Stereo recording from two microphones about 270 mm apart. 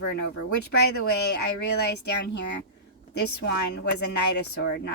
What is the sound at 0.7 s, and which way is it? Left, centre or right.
Speech, left.